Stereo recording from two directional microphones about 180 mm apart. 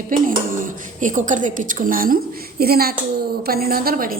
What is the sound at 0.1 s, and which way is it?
A woman's voice, 50° right (ahead or behind).